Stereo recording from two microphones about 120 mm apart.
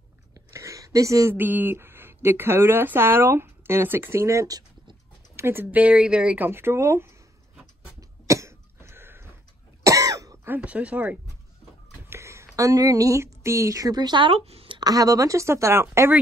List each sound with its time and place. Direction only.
0.3 s a sound: 25° right (ahead or behind)
1.3 s speech: 15° right (ahead or behind); by 5.4 s 30° right (ahead or behind)
5.4 s speech: 20° right (ahead or behind)
8.0 s cough: 25° right (ahead or behind)
10.5 s speech: 10° right (ahead or behind)
12.1 s speech: 25° right (ahead or behind); by 14.3 s 40° right (ahead or behind)
14.3 s a woman's voice: 55° right (ahead or behind)
14.8 s speech: 30° right (ahead or behind)